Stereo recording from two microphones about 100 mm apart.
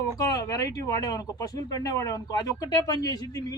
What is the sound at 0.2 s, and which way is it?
Speech, 35° left (ahead or behind).